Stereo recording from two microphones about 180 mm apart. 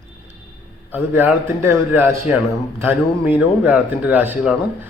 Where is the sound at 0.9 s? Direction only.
10° right (ahead or behind).